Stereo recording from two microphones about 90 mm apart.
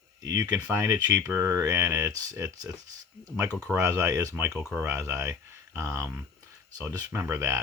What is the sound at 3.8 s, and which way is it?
Speech, 35° right (ahead or behind).